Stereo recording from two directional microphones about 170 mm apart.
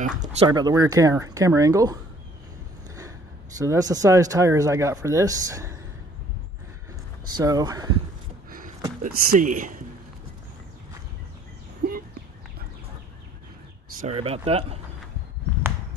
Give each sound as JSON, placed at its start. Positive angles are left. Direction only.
{"t": 0.5, "sound": "speech", "side_deg": -25}
{"t": 3.5, "sound": "speech", "side_deg": -20}
{"t": 7.2, "sound": "speech", "side_deg": -25}
{"t": 8.5, "sound": "a sound", "side_deg": -55}
{"t": 9.0, "sound": "speech", "side_deg": -50}
{"t": 14.0, "sound": "speech", "side_deg": -35}